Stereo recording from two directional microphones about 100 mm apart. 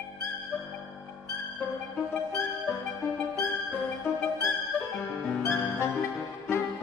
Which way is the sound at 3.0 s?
30° left (ahead or behind).